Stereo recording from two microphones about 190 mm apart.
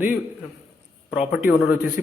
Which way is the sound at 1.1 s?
5° right (ahead or behind).